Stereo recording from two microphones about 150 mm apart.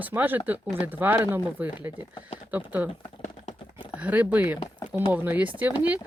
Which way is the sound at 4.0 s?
10° right (ahead or behind).